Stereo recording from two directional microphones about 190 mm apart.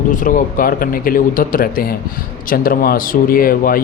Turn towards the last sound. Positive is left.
turn(degrees=50)  # may be behind; listen again after turning